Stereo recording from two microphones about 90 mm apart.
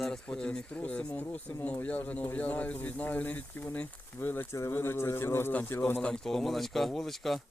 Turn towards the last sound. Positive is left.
turn(degrees=0)  # may be behind; listen again after turning